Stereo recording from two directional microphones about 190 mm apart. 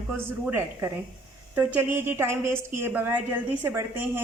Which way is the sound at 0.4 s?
10° right (ahead or behind).